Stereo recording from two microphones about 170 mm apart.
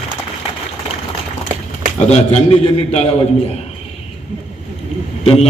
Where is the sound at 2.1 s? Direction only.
40° left (ahead or behind).